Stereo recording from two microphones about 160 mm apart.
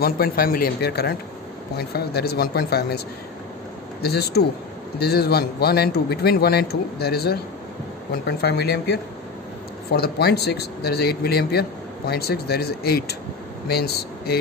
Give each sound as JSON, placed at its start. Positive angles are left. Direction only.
{"t": 0.0, "sound": "speech", "side_deg": 65}
{"t": 4.0, "sound": "a man's voice", "side_deg": 85}
{"t": 9.8, "sound": "a man's voice", "side_deg": 75}